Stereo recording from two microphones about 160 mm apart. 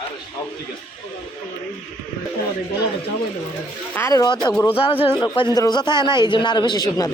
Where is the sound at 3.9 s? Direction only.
20° left (ahead or behind).